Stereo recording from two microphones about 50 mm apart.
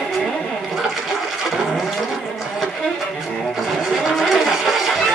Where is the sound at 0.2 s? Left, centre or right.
Centre.